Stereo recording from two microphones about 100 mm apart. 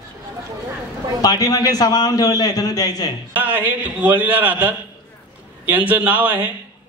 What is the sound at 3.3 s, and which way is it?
A man's voice, 20° right (ahead or behind).